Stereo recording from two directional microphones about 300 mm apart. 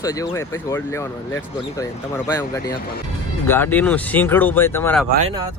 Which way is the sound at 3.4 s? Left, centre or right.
Centre.